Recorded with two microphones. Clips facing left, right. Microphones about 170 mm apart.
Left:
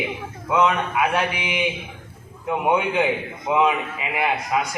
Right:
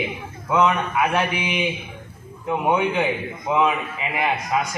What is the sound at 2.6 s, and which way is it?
A man's voice, 15° left (ahead or behind).